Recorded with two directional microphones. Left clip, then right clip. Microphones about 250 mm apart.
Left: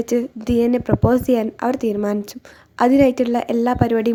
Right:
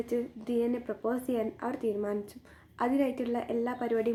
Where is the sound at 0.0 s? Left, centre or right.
Left.